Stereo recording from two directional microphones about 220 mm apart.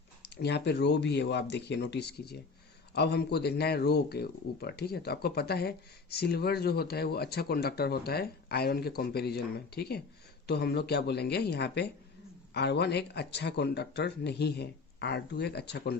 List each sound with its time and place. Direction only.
0.4 s speech: 50° left (ahead or behind)